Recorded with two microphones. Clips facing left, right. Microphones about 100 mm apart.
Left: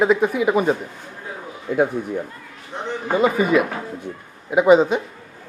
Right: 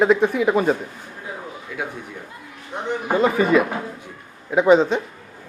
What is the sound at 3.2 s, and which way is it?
Speech, 5° left (ahead or behind).